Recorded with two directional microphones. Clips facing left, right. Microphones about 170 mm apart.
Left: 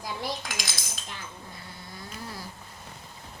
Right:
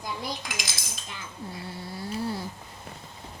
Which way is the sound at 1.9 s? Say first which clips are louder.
Right 10 dB; 30° right (ahead or behind).